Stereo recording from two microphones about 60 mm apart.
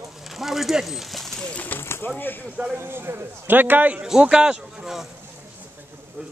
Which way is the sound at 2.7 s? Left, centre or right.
Right.